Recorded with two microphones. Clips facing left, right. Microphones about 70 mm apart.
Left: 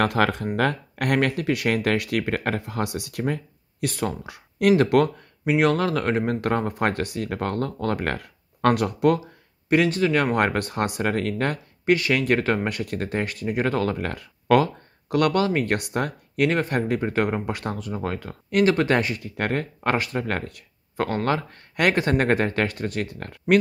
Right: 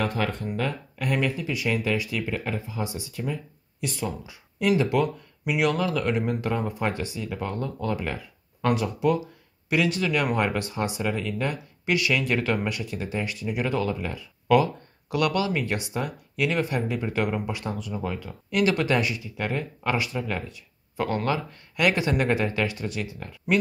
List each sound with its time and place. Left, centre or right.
0.0 s speech: left
3.8 s speech: left
5.4 s speech: left
9.7 s speech: left
10.3 s speech: left